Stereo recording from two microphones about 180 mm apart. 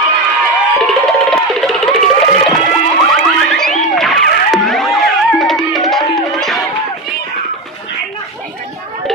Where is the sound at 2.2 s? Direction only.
30° left (ahead or behind).